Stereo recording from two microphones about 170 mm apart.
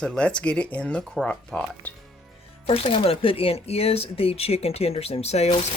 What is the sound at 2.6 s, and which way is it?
Speech, 35° left (ahead or behind).